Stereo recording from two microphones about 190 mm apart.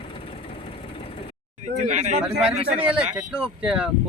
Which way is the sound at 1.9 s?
35° right (ahead or behind).